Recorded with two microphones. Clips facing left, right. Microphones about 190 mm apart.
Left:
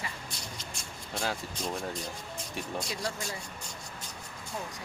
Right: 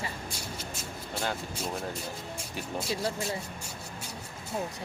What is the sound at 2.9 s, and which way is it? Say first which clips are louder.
Speech: right 4 dB; 25° right (ahead or behind).